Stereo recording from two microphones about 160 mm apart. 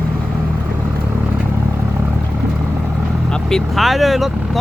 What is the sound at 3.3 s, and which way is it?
Vehicle, 5° left (ahead or behind).